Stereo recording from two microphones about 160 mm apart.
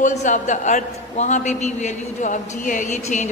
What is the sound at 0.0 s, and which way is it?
A man's voice, 50° left (ahead or behind).